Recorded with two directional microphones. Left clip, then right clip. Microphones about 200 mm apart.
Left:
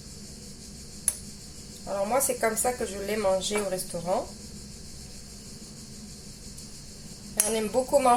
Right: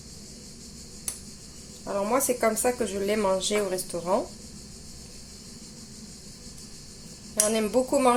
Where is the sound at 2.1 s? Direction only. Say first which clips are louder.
Right 2 dB; 45° right (ahead or behind).